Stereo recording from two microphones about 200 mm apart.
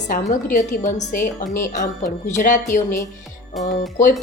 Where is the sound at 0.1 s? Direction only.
40° left (ahead or behind).